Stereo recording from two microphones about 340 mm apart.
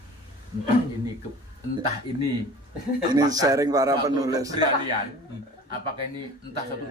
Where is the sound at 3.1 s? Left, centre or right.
Centre.